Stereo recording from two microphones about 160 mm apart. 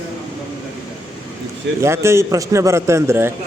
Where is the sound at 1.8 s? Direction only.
15° right (ahead or behind).